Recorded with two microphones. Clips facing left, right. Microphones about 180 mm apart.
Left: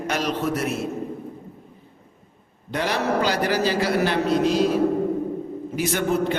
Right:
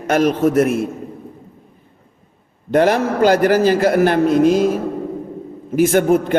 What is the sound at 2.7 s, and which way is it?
A man's voice, 50° right (ahead or behind).